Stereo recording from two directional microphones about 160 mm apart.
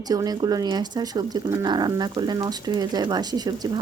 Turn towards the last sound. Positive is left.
turn(degrees=-25)  # may be behind; listen again after turning